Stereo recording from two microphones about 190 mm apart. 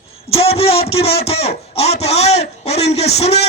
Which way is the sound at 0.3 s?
30° left (ahead or behind).